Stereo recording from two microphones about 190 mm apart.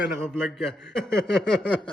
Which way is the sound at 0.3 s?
5° left (ahead or behind).